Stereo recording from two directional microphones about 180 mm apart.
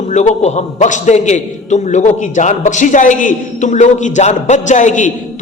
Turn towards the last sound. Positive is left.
turn(degrees=45)  # may be behind; listen again after turning